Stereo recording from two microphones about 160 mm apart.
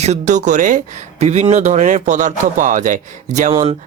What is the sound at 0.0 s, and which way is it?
Speech, 45° right (ahead or behind).